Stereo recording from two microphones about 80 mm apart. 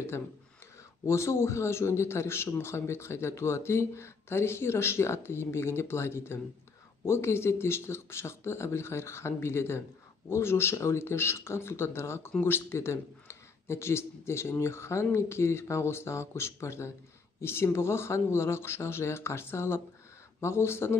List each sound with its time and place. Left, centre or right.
1.0 s a man's voice: left